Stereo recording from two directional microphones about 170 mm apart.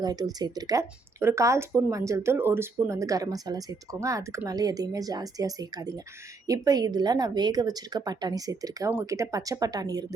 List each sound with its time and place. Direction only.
0.0 s speech: 25° right (ahead or behind)